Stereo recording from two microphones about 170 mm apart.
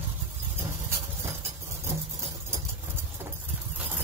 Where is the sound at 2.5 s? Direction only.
15° right (ahead or behind).